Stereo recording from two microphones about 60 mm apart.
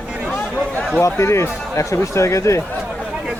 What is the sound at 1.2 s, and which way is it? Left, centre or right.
Speech, left.